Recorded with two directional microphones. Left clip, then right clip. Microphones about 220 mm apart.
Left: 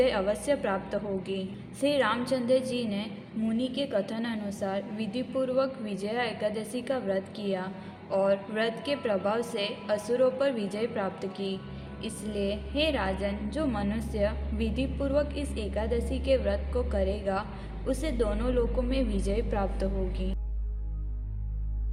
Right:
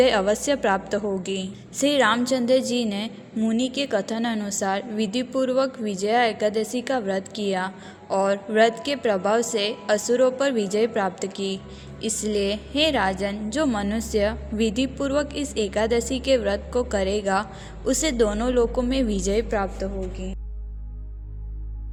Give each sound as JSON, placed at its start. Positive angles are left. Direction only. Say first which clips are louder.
{"t": 0.0, "sound": "a woman's voice", "louder": "right 7 dB", "side_deg": -30}